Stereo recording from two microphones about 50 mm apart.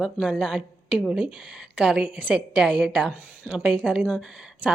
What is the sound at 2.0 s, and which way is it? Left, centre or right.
Speech, right.